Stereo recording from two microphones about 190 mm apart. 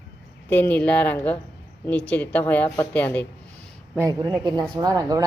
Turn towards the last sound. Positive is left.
turn(degrees=-20)  # may be behind; listen again after turning